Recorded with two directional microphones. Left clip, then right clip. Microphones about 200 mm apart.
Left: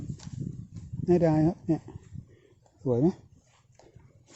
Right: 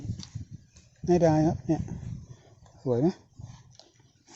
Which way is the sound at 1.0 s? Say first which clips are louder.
Right 1 dB; 15° left (ahead or behind).